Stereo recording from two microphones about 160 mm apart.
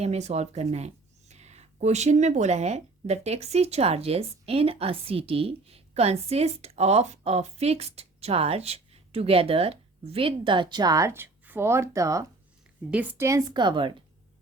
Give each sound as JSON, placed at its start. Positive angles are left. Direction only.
{"t": 0.0, "sound": "a woman's voice", "side_deg": -40}